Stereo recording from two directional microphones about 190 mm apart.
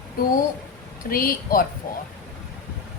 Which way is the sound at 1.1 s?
50° left (ahead or behind).